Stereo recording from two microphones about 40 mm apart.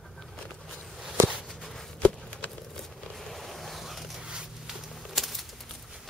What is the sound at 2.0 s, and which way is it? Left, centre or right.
Chop, left.